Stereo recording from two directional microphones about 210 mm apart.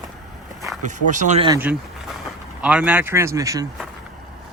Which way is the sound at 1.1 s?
35° right (ahead or behind).